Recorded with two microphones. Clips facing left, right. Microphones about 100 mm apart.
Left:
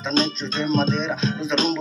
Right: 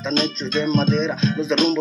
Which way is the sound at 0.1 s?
30° left (ahead or behind).